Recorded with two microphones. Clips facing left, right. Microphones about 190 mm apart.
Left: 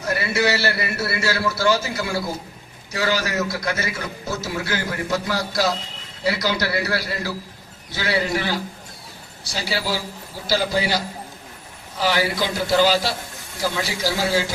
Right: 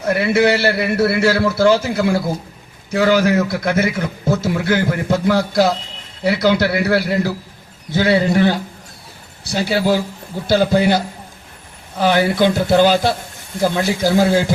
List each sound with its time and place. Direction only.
0.0 s a man's voice: 55° right (ahead or behind)